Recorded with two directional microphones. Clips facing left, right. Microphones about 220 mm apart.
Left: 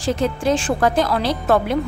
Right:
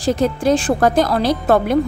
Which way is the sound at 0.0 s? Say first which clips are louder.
Right 3 dB; 40° right (ahead or behind).